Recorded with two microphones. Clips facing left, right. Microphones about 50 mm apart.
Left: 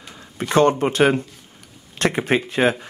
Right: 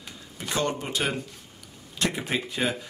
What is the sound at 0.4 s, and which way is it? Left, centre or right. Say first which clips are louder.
Speech: left 12 dB; left.